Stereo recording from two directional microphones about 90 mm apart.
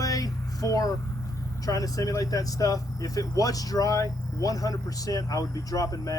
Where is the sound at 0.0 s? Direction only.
40° left (ahead or behind).